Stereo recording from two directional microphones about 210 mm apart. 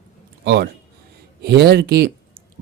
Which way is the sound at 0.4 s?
50° right (ahead or behind).